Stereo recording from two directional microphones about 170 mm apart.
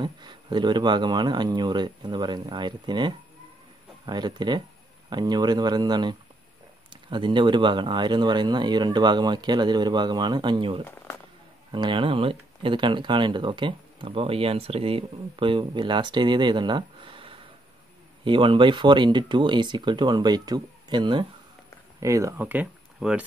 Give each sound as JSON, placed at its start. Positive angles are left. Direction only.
{"t": 0.0, "sound": "speech", "side_deg": -25}